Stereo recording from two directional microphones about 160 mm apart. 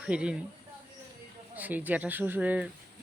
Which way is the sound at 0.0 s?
5° right (ahead or behind).